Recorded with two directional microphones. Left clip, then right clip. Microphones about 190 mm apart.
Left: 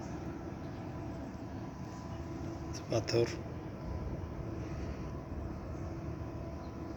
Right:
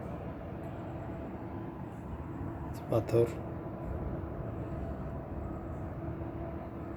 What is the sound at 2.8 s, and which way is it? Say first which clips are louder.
Speech: right 3 dB; 25° right (ahead or behind).